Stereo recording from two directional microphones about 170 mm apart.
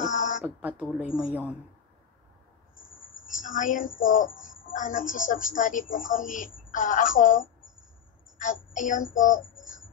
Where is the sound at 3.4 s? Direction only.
50° left (ahead or behind).